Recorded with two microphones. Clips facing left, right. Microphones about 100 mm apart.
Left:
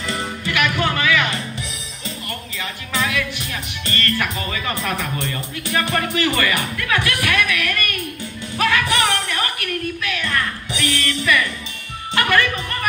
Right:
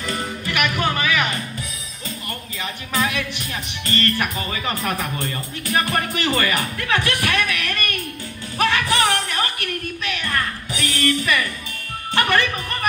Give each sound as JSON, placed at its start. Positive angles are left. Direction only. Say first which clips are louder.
{"t": 0.5, "sound": "music", "louder": "left 1 dB", "side_deg": -20}
{"t": 2.6, "sound": "speech", "louder": "right 1 dB", "side_deg": -25}
{"t": 8.5, "sound": "music", "louder": "even", "side_deg": -25}
{"t": 10.8, "sound": "speech", "louder": "right 2 dB", "side_deg": -20}
{"t": 12.2, "sound": "speech", "louder": "left 1 dB", "side_deg": -25}